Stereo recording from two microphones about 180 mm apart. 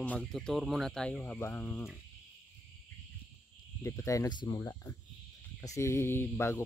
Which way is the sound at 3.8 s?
15° left (ahead or behind).